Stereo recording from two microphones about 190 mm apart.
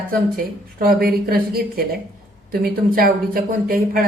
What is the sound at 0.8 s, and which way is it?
Speech, 50° right (ahead or behind).